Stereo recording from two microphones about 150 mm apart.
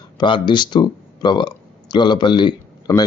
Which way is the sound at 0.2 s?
30° left (ahead or behind).